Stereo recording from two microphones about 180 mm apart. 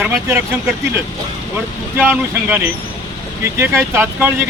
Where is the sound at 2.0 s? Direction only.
10° right (ahead or behind).